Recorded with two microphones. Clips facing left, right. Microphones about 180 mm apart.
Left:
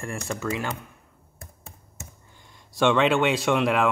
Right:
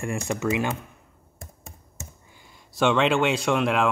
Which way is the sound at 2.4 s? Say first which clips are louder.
Left 1 dB; centre (ahead or behind).